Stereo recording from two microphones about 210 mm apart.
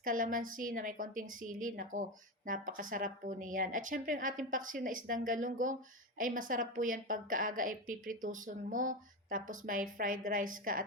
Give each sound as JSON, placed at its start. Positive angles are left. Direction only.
{"t": 0.0, "sound": "a woman's voice", "side_deg": -40}